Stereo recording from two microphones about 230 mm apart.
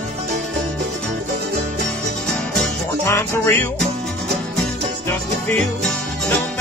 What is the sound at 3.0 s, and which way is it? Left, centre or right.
Music, centre.